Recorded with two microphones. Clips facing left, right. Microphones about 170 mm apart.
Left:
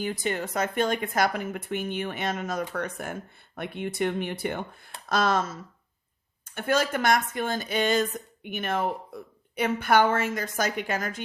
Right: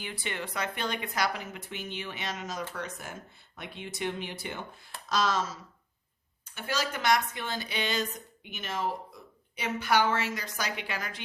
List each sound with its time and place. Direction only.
0.0 s a woman's voice: 45° left (ahead or behind)